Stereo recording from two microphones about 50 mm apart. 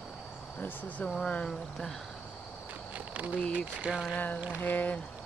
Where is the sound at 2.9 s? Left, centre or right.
Right.